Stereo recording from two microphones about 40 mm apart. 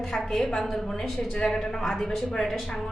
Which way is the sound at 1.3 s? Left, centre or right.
Centre.